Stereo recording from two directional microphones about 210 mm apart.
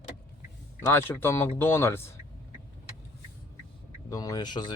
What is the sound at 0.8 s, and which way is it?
Speech, 10° left (ahead or behind).